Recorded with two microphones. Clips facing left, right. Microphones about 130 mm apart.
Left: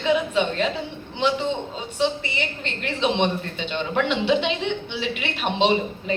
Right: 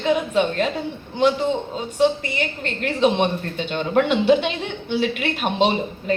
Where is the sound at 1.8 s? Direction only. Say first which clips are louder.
Right 5 dB; 40° right (ahead or behind).